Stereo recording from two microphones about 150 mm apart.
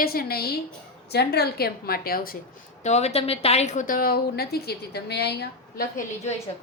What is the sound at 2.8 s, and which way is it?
A woman's voice, 45° left (ahead or behind).